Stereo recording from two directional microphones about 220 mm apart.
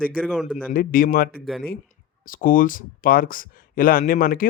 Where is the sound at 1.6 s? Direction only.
40° left (ahead or behind).